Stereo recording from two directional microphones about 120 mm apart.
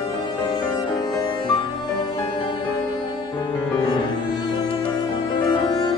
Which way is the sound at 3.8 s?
35° left (ahead or behind).